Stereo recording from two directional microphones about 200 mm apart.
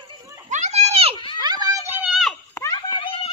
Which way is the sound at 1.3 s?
20° right (ahead or behind).